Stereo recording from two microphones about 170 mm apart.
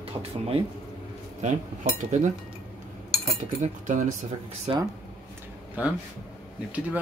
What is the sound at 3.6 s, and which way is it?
Speech, 45° right (ahead or behind).